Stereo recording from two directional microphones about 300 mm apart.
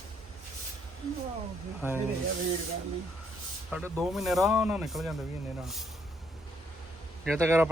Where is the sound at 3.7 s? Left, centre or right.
Centre.